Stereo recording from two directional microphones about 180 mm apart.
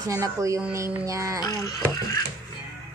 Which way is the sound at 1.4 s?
20° left (ahead or behind).